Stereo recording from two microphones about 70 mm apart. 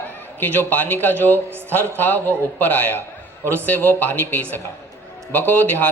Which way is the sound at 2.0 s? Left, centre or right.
Left.